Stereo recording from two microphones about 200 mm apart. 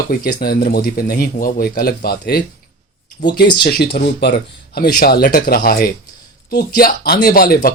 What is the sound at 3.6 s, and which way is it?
Speech, 55° left (ahead or behind).